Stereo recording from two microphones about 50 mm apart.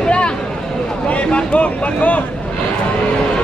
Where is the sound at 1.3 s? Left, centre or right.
Left.